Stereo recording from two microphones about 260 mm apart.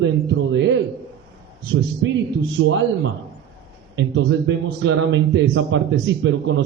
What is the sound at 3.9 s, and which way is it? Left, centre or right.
A man's voice, right.